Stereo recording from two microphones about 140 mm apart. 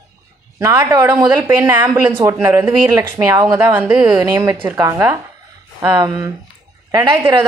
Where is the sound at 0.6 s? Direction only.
20° right (ahead or behind).